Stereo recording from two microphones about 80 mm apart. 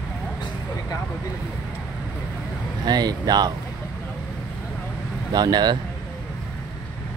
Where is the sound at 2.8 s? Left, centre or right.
Right.